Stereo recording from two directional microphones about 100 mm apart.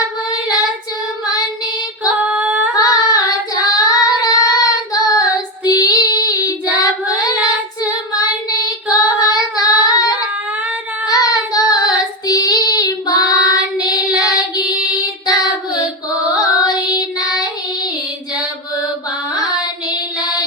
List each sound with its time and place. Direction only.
0.3 s child singing: 40° left (ahead or behind)
2.2 s female singing: 15° right (ahead or behind)
2.7 s singing: 40° left (ahead or behind)
5.6 s child singing: 40° left (ahead or behind)
7.8 s female singing: 40° left (ahead or behind)
11.0 s child singing: 40° left (ahead or behind)